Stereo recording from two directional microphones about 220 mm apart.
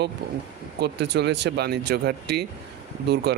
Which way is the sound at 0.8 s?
50° right (ahead or behind).